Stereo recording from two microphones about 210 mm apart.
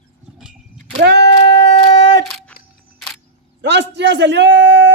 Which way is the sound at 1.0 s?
55° right (ahead or behind).